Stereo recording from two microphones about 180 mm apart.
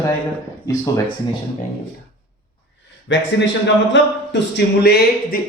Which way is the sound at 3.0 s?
90° left.